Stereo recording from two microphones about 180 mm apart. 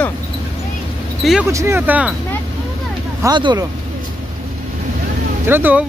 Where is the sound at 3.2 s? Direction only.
25° right (ahead or behind).